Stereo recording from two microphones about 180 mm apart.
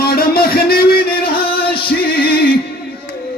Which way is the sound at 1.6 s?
60° left (ahead or behind).